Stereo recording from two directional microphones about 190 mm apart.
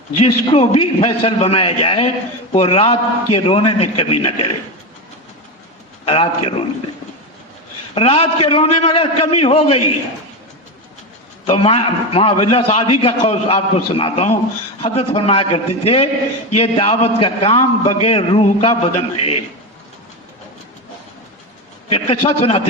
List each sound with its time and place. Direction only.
0.2 s a man's voice: 30° left (ahead or behind)
6.1 s a man's voice: 30° left (ahead or behind)
7.9 s a man's voice: 30° left (ahead or behind)
11.4 s a man's voice: 30° left (ahead or behind)
21.9 s a man's voice: 30° left (ahead or behind)